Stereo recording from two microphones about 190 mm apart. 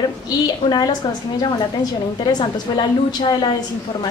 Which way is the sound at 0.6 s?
20° left (ahead or behind).